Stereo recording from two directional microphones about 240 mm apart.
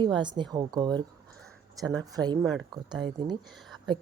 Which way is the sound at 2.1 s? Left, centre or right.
Centre.